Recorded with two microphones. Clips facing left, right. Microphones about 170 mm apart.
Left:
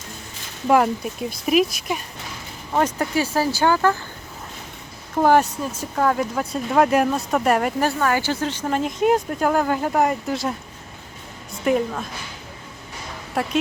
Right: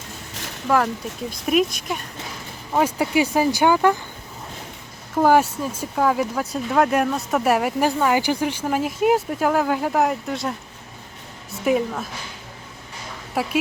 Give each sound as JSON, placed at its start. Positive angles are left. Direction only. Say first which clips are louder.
{"t": 1.5, "sound": "speech", "louder": "left 1 dB", "side_deg": 5}
{"t": 2.7, "sound": "speech", "louder": "right 2 dB", "side_deg": -10}
{"t": 5.2, "sound": "speech", "louder": "even", "side_deg": -10}
{"t": 11.6, "sound": "speech", "louder": "even", "side_deg": -5}
{"t": 13.3, "sound": "speech", "louder": "even", "side_deg": -5}